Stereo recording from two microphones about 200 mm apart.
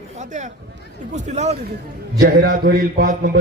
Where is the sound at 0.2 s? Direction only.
35° right (ahead or behind).